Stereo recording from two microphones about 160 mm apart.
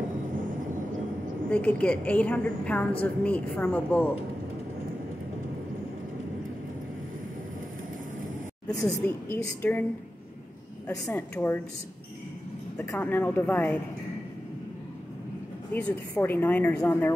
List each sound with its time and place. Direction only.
1.5 s a woman's voice: 10° left (ahead or behind)
8.6 s a woman's voice: 10° left (ahead or behind)
10.9 s a woman's voice: 15° left (ahead or behind)
12.7 s a woman's voice: 10° left (ahead or behind)
15.7 s a woman's voice: 10° left (ahead or behind)